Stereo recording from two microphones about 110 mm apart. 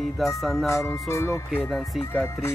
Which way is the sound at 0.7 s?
25° left (ahead or behind).